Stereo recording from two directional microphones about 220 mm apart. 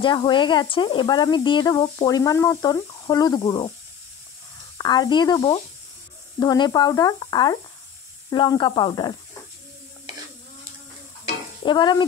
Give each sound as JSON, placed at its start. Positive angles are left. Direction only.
{"t": 0.0, "sound": "speech", "side_deg": 20}
{"t": 4.7, "sound": "speech", "side_deg": 20}
{"t": 11.6, "sound": "speech", "side_deg": 20}